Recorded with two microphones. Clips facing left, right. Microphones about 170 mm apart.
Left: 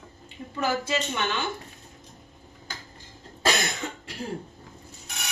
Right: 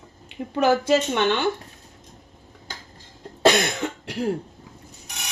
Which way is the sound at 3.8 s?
70° right (ahead or behind).